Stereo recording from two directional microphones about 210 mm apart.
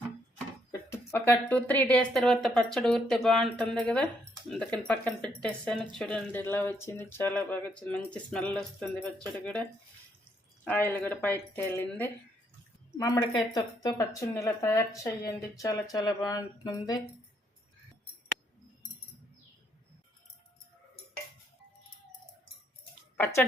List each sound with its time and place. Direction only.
0.7 s speech: 15° left (ahead or behind)
5.7 s speech: 25° right (ahead or behind)
6.0 s speech: 5° left (ahead or behind)
10.7 s speech: 10° left (ahead or behind)
23.1 s speech: 10° left (ahead or behind)